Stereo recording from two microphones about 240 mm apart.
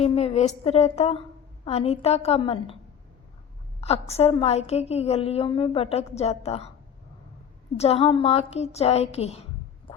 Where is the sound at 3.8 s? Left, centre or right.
Left.